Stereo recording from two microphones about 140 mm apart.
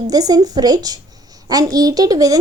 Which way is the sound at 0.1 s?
25° right (ahead or behind).